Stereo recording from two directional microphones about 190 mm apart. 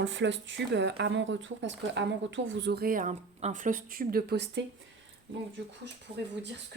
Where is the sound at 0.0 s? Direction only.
75° right (ahead or behind).